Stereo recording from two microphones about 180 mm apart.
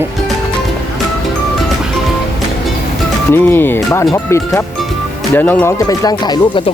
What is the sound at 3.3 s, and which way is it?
Speech, 10° left (ahead or behind).